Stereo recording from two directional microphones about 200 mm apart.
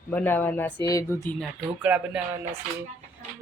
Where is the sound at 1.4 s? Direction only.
5° right (ahead or behind).